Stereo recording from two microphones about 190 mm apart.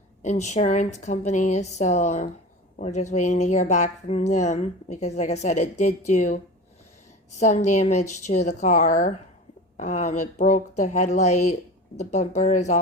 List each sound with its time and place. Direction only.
0.2 s speech: 35° left (ahead or behind)